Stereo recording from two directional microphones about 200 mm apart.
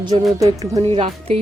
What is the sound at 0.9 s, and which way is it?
Speech, 25° right (ahead or behind).